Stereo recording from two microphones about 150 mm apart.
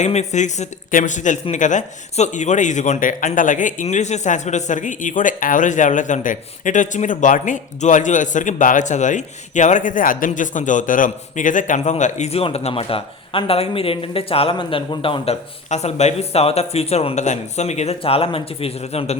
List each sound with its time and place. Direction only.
0.0 s speech: 50° left (ahead or behind)